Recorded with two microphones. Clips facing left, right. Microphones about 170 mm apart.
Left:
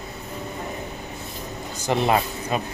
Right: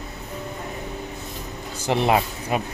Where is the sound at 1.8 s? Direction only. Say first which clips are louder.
Right 1 dB; 10° right (ahead or behind).